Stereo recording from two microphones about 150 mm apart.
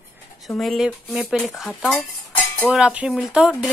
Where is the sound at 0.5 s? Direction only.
Centre (ahead or behind).